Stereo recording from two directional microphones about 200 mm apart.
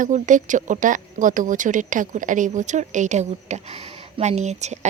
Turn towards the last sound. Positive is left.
turn(degrees=-35)  # may be behind; listen again after turning